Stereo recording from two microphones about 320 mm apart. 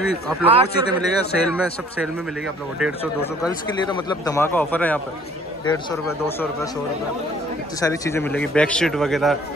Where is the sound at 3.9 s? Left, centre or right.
Centre.